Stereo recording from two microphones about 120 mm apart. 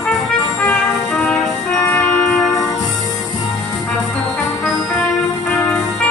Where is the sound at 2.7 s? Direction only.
30° left (ahead or behind).